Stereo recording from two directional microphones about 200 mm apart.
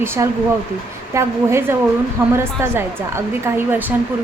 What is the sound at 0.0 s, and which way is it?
A woman's voice, 10° right (ahead or behind).